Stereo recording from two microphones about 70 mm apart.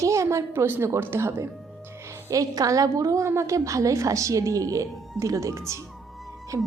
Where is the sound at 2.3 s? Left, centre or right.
Right.